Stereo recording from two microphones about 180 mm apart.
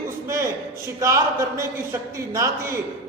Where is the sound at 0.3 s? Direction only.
15° right (ahead or behind).